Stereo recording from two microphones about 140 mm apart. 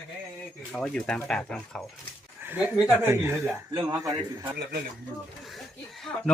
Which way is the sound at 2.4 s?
10° right (ahead or behind).